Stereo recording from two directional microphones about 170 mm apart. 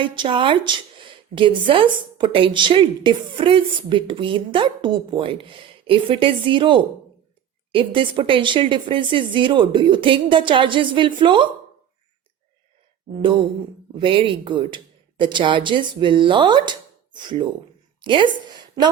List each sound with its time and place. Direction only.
0.0 s a woman's voice: 30° right (ahead or behind)
13.9 s a woman's voice: 30° right (ahead or behind)